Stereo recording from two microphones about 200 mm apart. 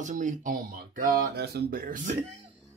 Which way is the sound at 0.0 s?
40° right (ahead or behind).